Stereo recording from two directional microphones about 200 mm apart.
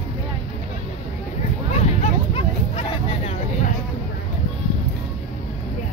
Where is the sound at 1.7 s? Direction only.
30° left (ahead or behind).